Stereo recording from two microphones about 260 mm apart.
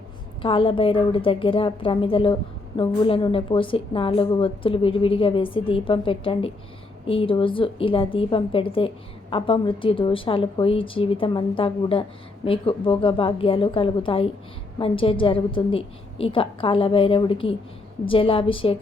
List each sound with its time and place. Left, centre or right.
0.4 s a woman's voice: left